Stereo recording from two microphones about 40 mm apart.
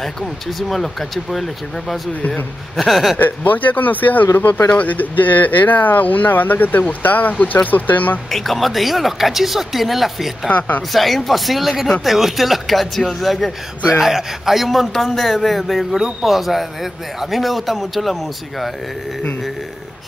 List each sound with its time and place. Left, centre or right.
0.6 s a man's voice: centre
2.8 s a man's voice: centre
3.2 s speech: left
8.3 s a man's voice: centre